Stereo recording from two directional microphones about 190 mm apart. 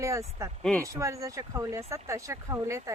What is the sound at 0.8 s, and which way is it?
Speech, 15° right (ahead or behind).